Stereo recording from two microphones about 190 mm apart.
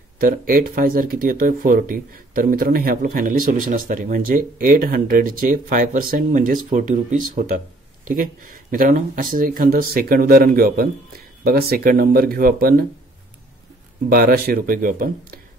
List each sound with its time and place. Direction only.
0.2 s speech: 50° right (ahead or behind)
14.0 s speech: 50° right (ahead or behind)